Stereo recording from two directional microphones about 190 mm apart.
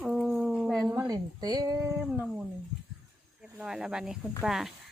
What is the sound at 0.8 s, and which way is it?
Speech, 15° right (ahead or behind).